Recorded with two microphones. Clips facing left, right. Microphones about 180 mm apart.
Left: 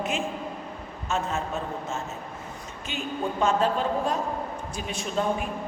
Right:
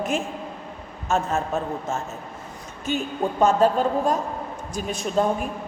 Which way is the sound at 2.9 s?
45° right (ahead or behind).